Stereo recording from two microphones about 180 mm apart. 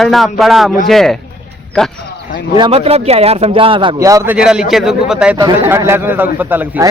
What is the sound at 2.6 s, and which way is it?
Speech, 35° right (ahead or behind).